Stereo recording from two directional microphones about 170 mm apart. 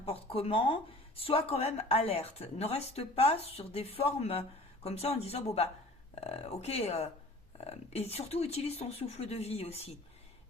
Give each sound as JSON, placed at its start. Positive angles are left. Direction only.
{"t": 0.0, "sound": "speech", "side_deg": 35}